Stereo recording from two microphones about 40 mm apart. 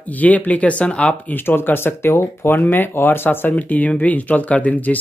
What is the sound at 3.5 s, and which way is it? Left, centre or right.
Speech, left.